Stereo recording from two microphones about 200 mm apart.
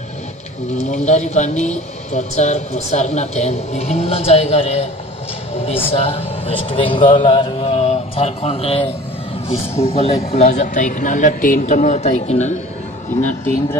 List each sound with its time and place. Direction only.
0.7 s a man's voice: 35° left (ahead or behind)